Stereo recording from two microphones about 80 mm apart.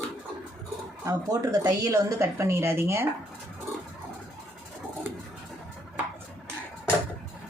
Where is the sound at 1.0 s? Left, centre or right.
Right.